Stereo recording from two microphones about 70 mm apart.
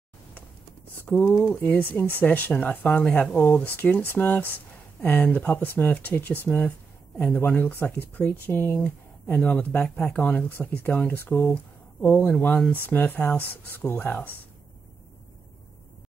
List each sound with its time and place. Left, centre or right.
1.1 s speech: centre
1.7 s speech: left
11.1 s speech: left
11.3 s speech: centre